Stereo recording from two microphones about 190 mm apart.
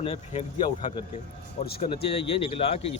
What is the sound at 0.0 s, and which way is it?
Speech, 35° left (ahead or behind).